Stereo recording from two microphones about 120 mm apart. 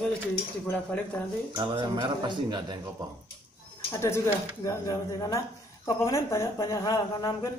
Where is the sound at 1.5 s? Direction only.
40° right (ahead or behind).